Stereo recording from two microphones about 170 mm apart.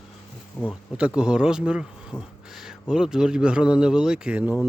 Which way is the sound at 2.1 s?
15° left (ahead or behind).